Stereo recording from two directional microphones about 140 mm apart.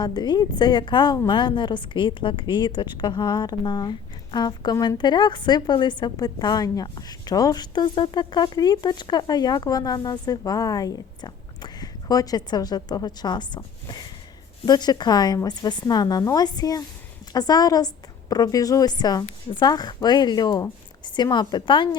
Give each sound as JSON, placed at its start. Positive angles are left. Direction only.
{"t": 0.0, "sound": "a woman's voice", "side_deg": 30}
{"t": 14.6, "sound": "a woman's voice", "side_deg": 30}